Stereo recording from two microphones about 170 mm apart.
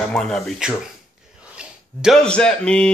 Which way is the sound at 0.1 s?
5° left (ahead or behind).